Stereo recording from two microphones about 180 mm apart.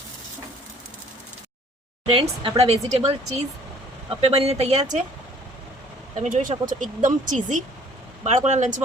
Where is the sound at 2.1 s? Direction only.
30° right (ahead or behind).